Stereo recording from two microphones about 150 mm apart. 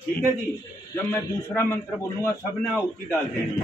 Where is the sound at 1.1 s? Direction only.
15° left (ahead or behind).